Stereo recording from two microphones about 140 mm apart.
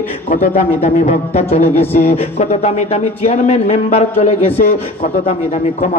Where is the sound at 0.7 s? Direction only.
45° left (ahead or behind).